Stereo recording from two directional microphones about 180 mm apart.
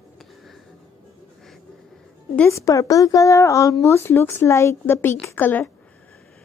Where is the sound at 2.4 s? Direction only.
15° left (ahead or behind).